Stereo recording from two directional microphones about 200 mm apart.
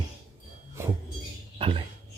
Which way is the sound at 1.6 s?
25° right (ahead or behind).